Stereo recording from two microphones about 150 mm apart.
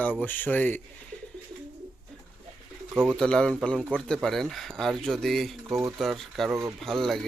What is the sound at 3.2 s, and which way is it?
Speech, 5° left (ahead or behind).